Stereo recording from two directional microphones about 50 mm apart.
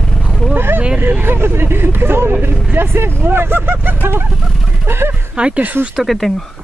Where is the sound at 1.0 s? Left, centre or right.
Right.